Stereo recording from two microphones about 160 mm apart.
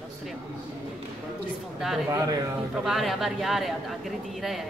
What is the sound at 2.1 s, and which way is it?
Speech, 25° right (ahead or behind).